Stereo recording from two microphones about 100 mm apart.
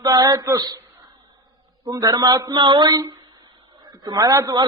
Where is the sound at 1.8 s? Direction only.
40° right (ahead or behind).